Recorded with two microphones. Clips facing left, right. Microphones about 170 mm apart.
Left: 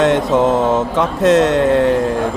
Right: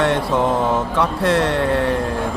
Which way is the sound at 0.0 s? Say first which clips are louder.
Left 5 dB; 20° left (ahead or behind).